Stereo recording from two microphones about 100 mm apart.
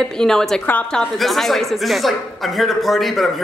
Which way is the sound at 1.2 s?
Centre (ahead or behind).